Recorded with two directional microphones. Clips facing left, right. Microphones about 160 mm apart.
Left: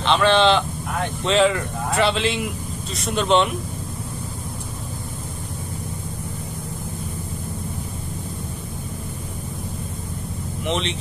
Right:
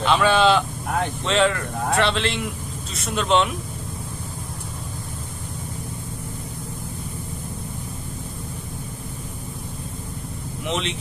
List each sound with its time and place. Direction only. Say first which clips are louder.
0.0 s speech: left 1 dB; 10° right (ahead or behind)
10.7 s speech: left 2 dB; 5° right (ahead or behind)